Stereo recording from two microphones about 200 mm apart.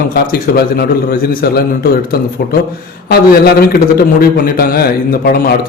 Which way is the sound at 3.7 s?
50° left (ahead or behind).